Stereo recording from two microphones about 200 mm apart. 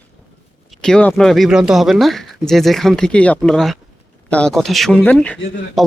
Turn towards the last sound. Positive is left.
turn(degrees=0)  # may be behind; listen again after turning